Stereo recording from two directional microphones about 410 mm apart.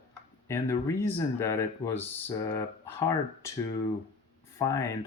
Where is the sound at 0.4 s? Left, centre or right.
Centre.